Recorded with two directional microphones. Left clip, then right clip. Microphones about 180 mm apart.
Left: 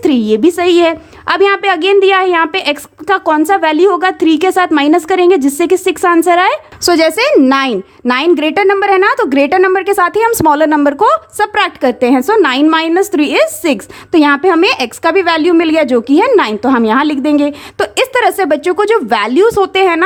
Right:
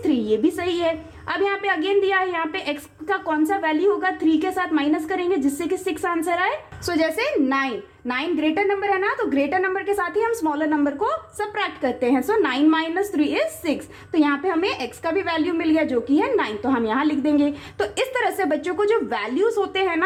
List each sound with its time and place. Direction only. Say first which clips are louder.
0.0 s a woman's voice: left 10 dB; 40° left (ahead or behind)